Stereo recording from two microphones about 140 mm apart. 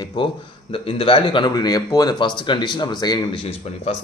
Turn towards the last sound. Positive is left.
turn(degrees=50)  # may be behind; listen again after turning